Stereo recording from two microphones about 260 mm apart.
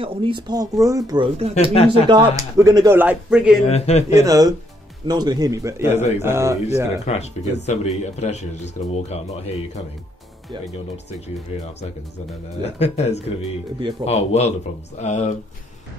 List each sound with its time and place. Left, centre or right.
0.0 s speech: centre
1.5 s speech: left
2.0 s speech: centre
3.6 s speech: left
4.2 s speech: centre
5.9 s speech: left
6.2 s speech: centre
7.1 s speech: left
12.6 s speech: left